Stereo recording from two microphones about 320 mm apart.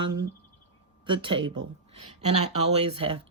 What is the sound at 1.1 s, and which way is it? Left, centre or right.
Speech, centre.